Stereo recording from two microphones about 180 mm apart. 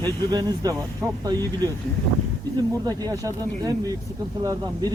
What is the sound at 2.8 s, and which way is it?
Speech, 20° right (ahead or behind).